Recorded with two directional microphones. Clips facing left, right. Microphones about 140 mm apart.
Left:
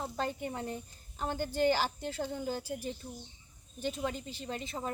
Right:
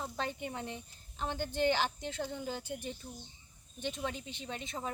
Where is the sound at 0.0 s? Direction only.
5° left (ahead or behind).